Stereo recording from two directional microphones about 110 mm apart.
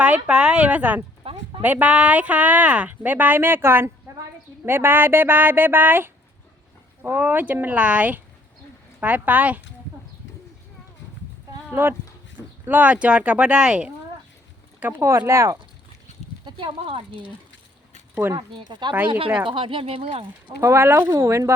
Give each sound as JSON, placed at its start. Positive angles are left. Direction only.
{"t": 0.0, "sound": "speech", "side_deg": -10}
{"t": 1.2, "sound": "a sound", "side_deg": -55}
{"t": 1.6, "sound": "speech", "side_deg": -15}
{"t": 11.7, "sound": "speech", "side_deg": -20}
{"t": 16.5, "sound": "speech", "side_deg": -50}
{"t": 18.1, "sound": "speech", "side_deg": -20}
{"t": 18.3, "sound": "speech", "side_deg": -45}
{"t": 20.6, "sound": "speech", "side_deg": -25}